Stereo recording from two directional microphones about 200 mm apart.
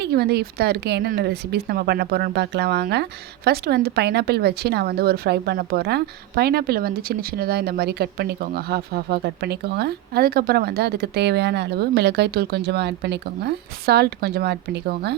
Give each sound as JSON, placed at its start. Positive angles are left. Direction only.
{"t": 0.0, "sound": "speech", "side_deg": -55}